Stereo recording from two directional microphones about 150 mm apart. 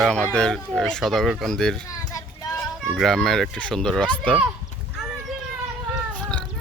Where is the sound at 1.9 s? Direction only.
25° left (ahead or behind).